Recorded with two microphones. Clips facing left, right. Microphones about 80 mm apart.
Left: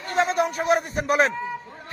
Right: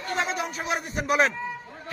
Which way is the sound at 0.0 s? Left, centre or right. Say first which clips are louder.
Left 6 dB; left.